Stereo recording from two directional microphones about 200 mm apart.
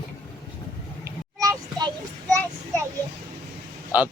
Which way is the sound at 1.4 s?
20° right (ahead or behind).